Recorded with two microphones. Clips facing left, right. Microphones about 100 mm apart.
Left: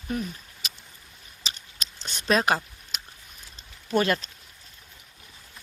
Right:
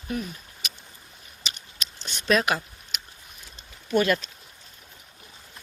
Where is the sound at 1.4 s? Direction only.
35° left (ahead or behind).